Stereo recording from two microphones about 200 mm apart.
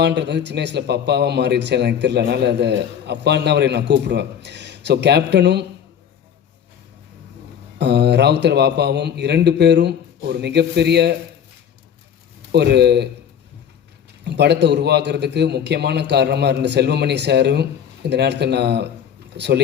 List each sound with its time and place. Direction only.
0.0 s a man's voice: 60° right (ahead or behind)
7.8 s a man's voice: 60° right (ahead or behind)
12.5 s a man's voice: 55° right (ahead or behind)
14.3 s a man's voice: 55° right (ahead or behind)